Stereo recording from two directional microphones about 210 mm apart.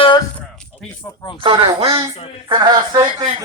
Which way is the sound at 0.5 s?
5° left (ahead or behind).